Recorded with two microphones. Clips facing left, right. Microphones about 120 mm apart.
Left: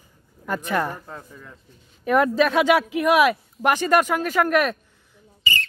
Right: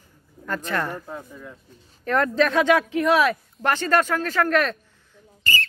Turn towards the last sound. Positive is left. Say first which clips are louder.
# right 1 dB
turn(degrees=0)  # may be behind; listen again after turning